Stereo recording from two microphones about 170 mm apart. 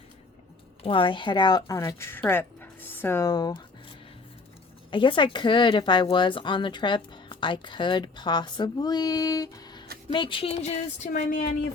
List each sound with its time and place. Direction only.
0.8 s speech: 30° left (ahead or behind)
4.9 s speech: 30° left (ahead or behind); by 11.5 s 55° left (ahead or behind)